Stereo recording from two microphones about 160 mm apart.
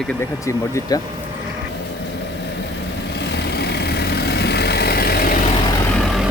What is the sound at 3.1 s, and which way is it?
Vehicle, 90° left.